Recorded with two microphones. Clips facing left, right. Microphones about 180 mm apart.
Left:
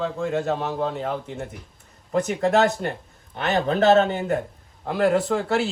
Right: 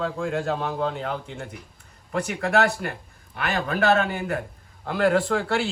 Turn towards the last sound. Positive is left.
turn(degrees=0)  # may be behind; listen again after turning